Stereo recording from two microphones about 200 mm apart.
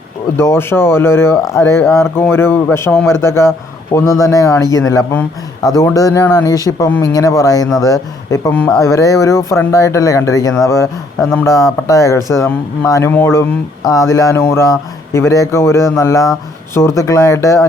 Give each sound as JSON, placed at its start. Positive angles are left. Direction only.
{"t": 0.3, "sound": "speech", "side_deg": 10}